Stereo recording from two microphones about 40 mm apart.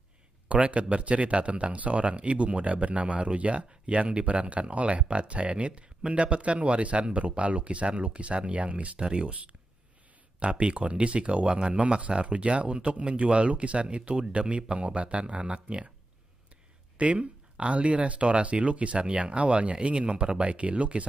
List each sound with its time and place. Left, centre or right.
0.5 s speech: right
16.9 s speech: right